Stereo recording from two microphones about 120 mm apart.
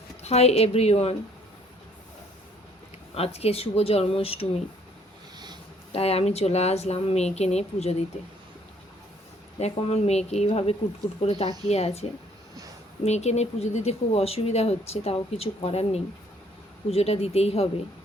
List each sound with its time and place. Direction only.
0.2 s speech: 60° left (ahead or behind)
3.2 s speech: 60° left (ahead or behind)
5.9 s speech: 60° left (ahead or behind)
9.6 s speech: 60° left (ahead or behind)
13.1 s speech: 65° left (ahead or behind)